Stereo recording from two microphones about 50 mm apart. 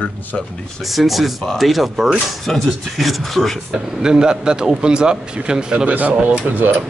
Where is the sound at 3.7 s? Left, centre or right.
Centre.